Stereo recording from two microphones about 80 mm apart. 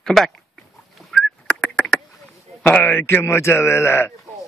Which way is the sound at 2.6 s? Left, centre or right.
Left.